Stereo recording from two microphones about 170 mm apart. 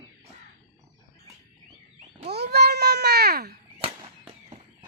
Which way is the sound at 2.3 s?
70° right (ahead or behind).